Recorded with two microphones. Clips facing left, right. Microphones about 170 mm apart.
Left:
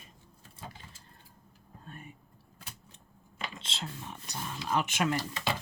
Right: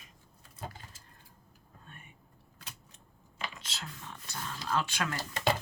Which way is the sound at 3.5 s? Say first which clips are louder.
Left 4 dB; 25° left (ahead or behind).